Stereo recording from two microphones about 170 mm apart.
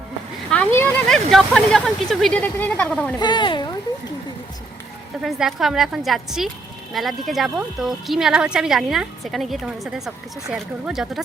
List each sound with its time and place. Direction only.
0.5 s speech: 5° left (ahead or behind)
3.2 s speech: 25° left (ahead or behind)
5.2 s speech: centre (ahead or behind)